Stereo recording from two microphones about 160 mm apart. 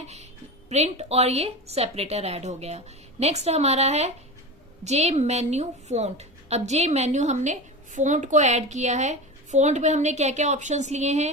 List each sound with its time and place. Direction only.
0.7 s a woman's voice: 40° right (ahead or behind)